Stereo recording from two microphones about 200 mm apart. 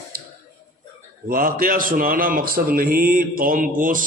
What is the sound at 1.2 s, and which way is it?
A man's voice, 45° right (ahead or behind).